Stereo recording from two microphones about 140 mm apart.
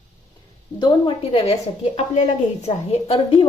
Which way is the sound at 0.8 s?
40° left (ahead or behind).